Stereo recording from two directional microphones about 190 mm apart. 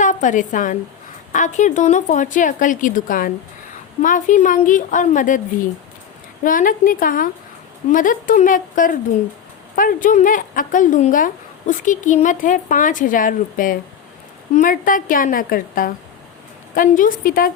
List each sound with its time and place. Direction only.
0.0 s a woman's voice: 40° left (ahead or behind)
6.4 s speech: 45° left (ahead or behind)